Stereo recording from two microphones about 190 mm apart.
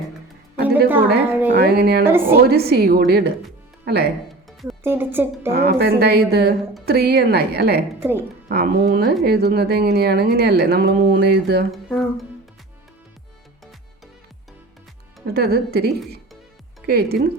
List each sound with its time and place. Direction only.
0.9 s a woman's voice: 10° right (ahead or behind)
1.5 s speech: 55° right (ahead or behind)
4.8 s a woman's voice: 10° right (ahead or behind)
5.5 s speech: 55° right (ahead or behind)
11.7 s speech: 5° left (ahead or behind)
15.3 s speech: 55° right (ahead or behind)